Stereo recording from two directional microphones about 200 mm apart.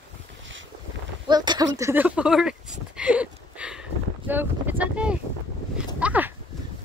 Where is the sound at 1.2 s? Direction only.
20° right (ahead or behind); by 3.7 s 5° right (ahead or behind).